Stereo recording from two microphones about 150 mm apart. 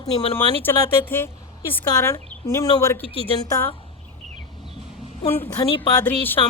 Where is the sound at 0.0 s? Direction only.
40° left (ahead or behind).